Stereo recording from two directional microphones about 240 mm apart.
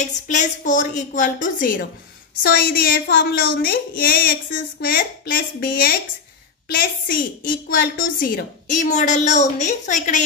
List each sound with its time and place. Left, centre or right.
0.0 s a woman's voice: left